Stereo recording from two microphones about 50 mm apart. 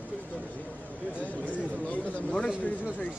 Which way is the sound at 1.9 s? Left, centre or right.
Left.